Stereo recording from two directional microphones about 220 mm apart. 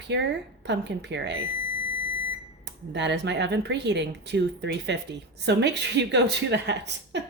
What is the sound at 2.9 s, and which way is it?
A woman's voice, 55° right (ahead or behind).